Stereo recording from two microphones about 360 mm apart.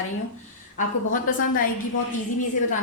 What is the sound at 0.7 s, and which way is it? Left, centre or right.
Speech, left.